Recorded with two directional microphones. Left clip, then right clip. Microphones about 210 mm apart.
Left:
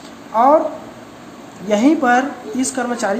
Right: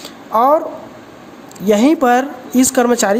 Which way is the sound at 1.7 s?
55° right (ahead or behind).